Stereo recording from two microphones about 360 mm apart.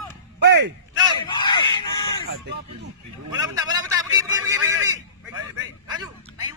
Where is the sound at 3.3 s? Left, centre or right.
Centre.